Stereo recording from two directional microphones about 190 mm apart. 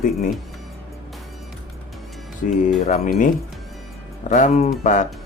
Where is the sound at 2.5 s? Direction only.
35° left (ahead or behind).